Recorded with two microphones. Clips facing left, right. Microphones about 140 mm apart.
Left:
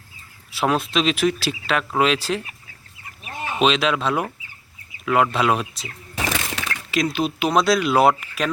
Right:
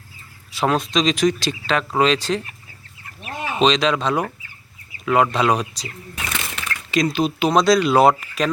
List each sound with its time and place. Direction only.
0.5 s speech: 5° left (ahead or behind)
3.6 s speech: 5° left (ahead or behind)
6.1 s a sound: 90° left
6.9 s speech: 5° left (ahead or behind)